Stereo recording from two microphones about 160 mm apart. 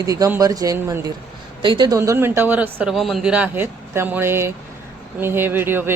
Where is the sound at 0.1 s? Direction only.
20° right (ahead or behind).